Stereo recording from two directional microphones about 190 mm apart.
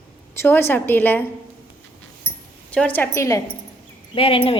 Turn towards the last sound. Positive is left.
turn(degrees=30)  # may be behind; listen again after turning